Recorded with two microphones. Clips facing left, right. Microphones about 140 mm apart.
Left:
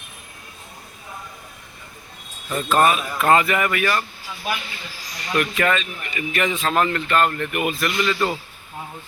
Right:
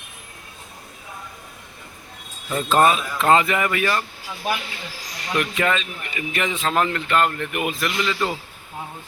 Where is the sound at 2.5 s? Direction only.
25° right (ahead or behind).